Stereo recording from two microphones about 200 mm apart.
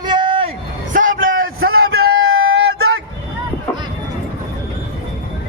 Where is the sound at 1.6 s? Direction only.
90° right.